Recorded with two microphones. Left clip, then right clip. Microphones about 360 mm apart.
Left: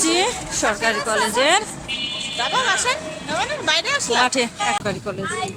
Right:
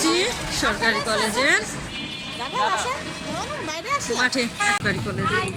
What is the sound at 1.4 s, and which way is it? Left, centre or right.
Speech, centre.